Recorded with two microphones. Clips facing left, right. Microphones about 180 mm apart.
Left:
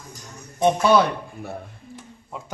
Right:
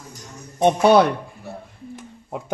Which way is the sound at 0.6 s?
60° right (ahead or behind).